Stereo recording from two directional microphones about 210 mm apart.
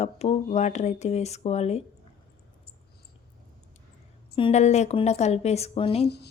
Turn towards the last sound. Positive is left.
turn(degrees=25)  # may be behind; listen again after turning